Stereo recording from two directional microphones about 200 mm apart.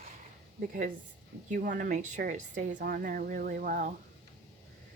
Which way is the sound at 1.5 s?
40° right (ahead or behind).